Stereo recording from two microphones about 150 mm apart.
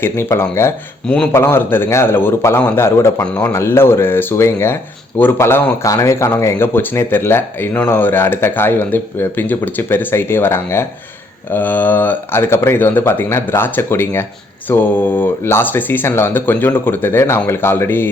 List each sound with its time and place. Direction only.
0.0 s speech: 15° left (ahead or behind)
1.0 s speech: 5° left (ahead or behind)